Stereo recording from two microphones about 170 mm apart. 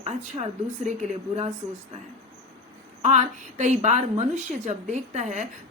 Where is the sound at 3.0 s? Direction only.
45° right (ahead or behind).